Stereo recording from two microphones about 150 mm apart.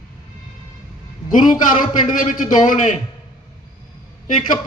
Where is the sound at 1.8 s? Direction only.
60° left (ahead or behind).